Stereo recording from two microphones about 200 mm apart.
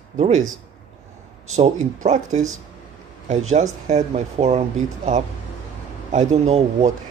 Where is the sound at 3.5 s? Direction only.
35° right (ahead or behind).